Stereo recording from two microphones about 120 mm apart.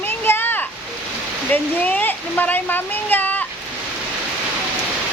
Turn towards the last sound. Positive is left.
turn(degrees=15)  # may be behind; listen again after turning